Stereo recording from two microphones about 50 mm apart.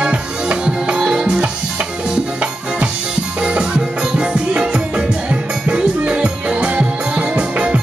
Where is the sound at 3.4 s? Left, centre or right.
Centre.